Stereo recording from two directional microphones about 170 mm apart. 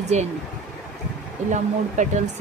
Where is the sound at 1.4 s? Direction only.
45° right (ahead or behind).